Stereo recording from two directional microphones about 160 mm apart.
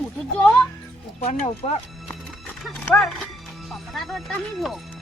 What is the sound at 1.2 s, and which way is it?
Speech, 40° left (ahead or behind).